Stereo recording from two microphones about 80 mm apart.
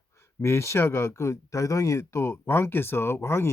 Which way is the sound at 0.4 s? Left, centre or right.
Left.